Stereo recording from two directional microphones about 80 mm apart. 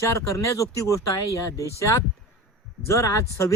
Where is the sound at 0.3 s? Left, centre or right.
Left.